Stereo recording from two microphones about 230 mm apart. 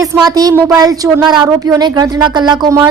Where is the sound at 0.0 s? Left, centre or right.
Centre.